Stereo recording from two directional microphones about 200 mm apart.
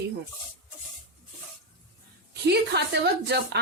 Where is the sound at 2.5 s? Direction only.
55° right (ahead or behind).